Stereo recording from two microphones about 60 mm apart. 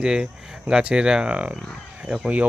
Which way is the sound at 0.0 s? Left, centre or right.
Centre.